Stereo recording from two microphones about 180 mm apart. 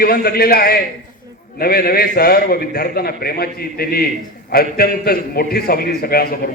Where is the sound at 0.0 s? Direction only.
55° left (ahead or behind).